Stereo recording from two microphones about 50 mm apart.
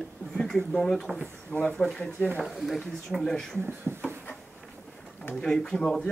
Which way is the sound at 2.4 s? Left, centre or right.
Centre.